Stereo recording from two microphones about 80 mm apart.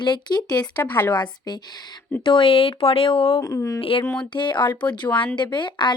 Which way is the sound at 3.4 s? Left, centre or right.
Left.